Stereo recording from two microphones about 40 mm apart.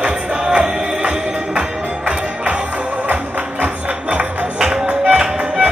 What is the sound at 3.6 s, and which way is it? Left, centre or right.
Music, right.